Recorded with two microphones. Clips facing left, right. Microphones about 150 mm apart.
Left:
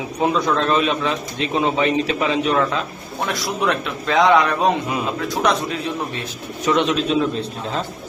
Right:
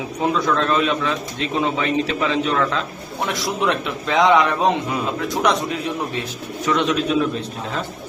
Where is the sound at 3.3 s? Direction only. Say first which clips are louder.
Even; 20° right (ahead or behind).